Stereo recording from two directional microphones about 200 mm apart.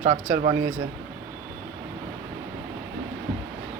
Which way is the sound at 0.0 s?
35° right (ahead or behind).